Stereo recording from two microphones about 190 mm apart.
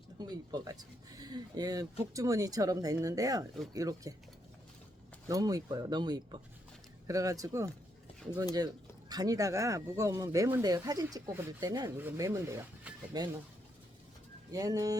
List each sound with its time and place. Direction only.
0.2 s speech: 20° right (ahead or behind)
5.3 s speech: 20° right (ahead or behind)
14.5 s speech: 20° right (ahead or behind)